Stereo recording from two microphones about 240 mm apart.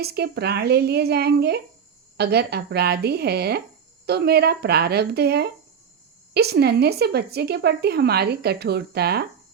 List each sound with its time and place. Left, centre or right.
0.0 s a woman's voice: right